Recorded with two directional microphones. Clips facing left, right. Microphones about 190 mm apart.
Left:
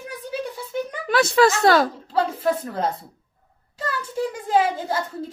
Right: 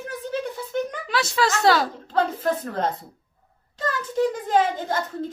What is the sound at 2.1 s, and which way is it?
A woman's voice, 10° left (ahead or behind).